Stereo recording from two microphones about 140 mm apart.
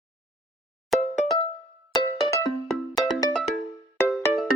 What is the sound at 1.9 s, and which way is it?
Music, 30° left (ahead or behind).